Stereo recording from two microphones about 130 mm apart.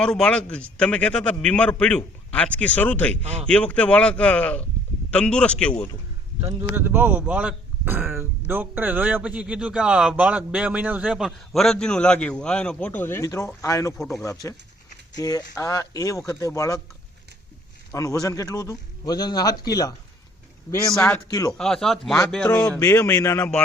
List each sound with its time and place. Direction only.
0.0 s a man's voice: 5° left (ahead or behind)
5.7 s a man's voice: 25° left (ahead or behind)
6.7 s a man's voice: 15° right (ahead or behind)
11.3 s a man's voice: 5° left (ahead or behind); by 16.8 s 25° left (ahead or behind)
17.9 s a man's voice: 25° left (ahead or behind)
20.9 s a man's voice: 5° left (ahead or behind)
21.2 s a man's voice: 25° left (ahead or behind)
21.6 s speech: 5° left (ahead or behind)
22.8 s a man's voice: 20° left (ahead or behind)